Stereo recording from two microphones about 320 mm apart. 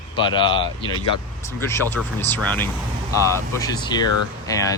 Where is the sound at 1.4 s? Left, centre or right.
Centre.